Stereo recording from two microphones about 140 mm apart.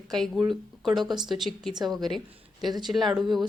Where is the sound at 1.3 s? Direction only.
Centre (ahead or behind).